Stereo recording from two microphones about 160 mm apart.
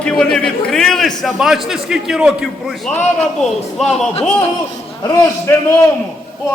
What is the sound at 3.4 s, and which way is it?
Speech, centre (ahead or behind).